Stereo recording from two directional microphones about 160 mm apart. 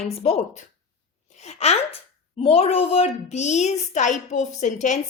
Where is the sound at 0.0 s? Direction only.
40° left (ahead or behind).